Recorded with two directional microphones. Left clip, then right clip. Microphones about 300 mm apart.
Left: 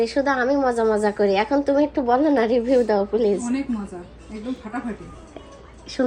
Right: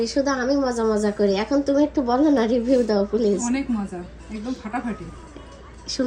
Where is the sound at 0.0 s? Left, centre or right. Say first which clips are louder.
Left 2 dB; centre.